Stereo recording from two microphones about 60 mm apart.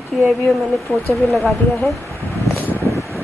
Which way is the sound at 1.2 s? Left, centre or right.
Centre.